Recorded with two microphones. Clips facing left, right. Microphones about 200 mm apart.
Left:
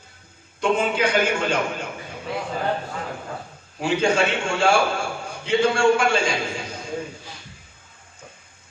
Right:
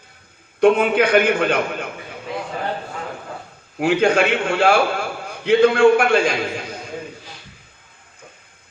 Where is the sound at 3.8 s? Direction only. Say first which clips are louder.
Right 4 dB; 60° right (ahead or behind).